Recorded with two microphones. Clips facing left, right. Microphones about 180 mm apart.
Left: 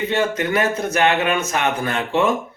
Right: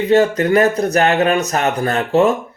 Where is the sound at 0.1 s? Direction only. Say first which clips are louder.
Right 11 dB; 40° right (ahead or behind).